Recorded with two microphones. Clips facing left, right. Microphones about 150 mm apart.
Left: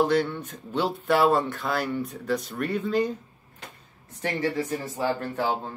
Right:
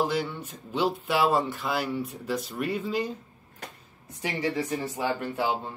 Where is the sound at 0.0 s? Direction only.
5° right (ahead or behind).